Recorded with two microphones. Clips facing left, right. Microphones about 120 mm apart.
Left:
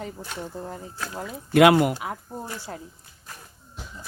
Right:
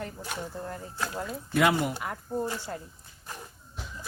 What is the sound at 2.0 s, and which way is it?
Speech, 10° left (ahead or behind).